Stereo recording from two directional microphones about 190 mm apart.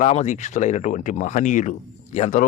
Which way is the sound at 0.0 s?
35° left (ahead or behind).